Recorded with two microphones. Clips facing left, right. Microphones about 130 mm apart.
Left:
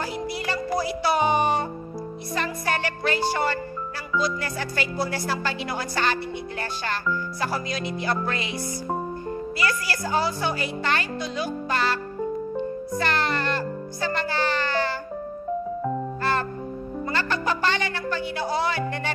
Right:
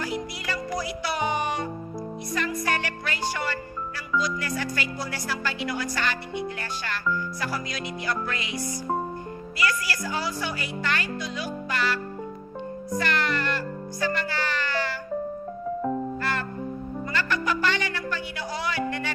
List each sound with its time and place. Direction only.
0.0 s music: 30° left (ahead or behind)
2.3 s speech: 30° left (ahead or behind)
9.6 s a child's voice: 30° left (ahead or behind)
16.2 s music: 30° left (ahead or behind)